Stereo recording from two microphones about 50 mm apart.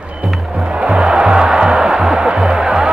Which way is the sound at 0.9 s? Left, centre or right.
Centre.